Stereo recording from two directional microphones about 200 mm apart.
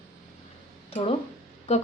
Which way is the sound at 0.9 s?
30° left (ahead or behind).